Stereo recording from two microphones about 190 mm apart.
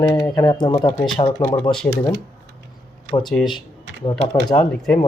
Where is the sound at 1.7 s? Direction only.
5° left (ahead or behind).